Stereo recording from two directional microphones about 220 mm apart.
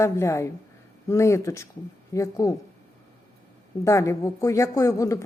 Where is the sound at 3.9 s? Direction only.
15° left (ahead or behind).